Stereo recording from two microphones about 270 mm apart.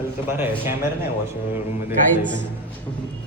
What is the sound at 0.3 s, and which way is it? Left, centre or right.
Speech, centre.